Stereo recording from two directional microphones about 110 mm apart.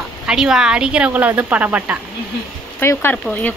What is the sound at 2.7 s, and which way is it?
Speech, 20° left (ahead or behind).